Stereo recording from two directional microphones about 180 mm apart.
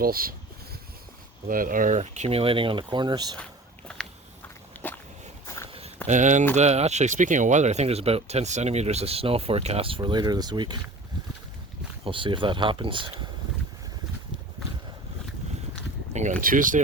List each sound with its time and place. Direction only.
0.0 s speech: 55° right (ahead or behind)
1.5 s speech: 50° right (ahead or behind); by 3.3 s 25° right (ahead or behind)
3.9 s biting: 5° left (ahead or behind)
4.7 s a sound: 10° left (ahead or behind)
6.1 s speech: 45° right (ahead or behind); by 10.8 s 25° right (ahead or behind)
12.0 s speech: 30° right (ahead or behind)
16.4 s speech: 50° right (ahead or behind)